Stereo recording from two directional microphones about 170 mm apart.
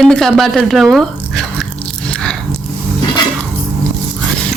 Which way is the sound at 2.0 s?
5° left (ahead or behind).